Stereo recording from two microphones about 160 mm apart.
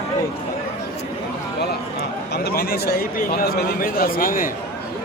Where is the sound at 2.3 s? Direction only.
80° left; by 4.5 s 60° left (ahead or behind).